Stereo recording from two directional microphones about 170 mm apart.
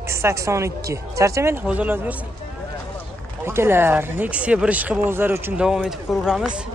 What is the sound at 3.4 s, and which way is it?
Speech, 15° right (ahead or behind).